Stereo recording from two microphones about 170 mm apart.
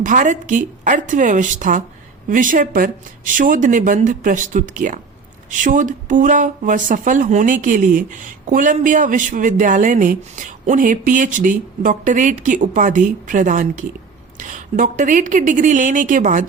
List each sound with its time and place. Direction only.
0.0 s speech: 50° right (ahead or behind)